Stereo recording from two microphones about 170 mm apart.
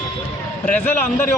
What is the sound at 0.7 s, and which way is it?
Speech, 10° left (ahead or behind).